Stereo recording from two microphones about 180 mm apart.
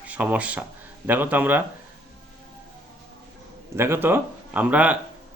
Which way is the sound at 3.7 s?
15° right (ahead or behind).